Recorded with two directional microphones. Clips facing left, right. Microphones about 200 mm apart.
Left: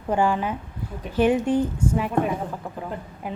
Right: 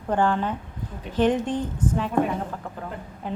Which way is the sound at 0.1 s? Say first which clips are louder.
Left 1 dB; 10° left (ahead or behind).